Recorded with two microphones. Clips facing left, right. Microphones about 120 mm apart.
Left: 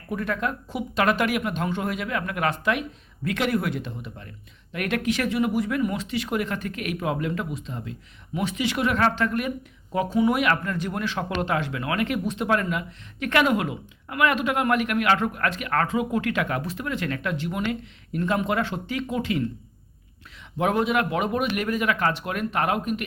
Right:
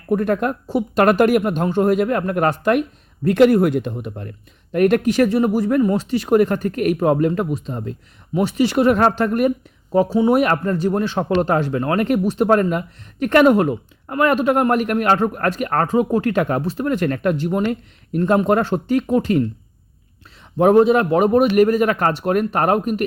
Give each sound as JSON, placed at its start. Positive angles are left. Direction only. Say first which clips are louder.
{"t": 0.1, "sound": "speech", "louder": "right 9 dB", "side_deg": -50}
{"t": 4.8, "sound": "speech", "louder": "right 10 dB", "side_deg": -40}
{"t": 9.9, "sound": "speech", "louder": "right 7 dB", "side_deg": -35}
{"t": 20.6, "sound": "speech", "louder": "right 10 dB", "side_deg": -35}